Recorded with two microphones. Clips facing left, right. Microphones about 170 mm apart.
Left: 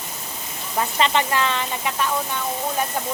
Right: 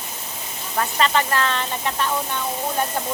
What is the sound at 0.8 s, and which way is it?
Speech, 20° left (ahead or behind).